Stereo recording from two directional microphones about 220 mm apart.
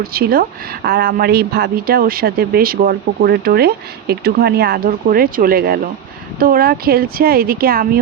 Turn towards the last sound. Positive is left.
turn(degrees=-40)  # may be behind; listen again after turning